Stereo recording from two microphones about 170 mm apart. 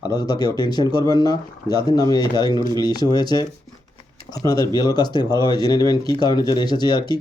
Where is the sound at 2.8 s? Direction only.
20° left (ahead or behind).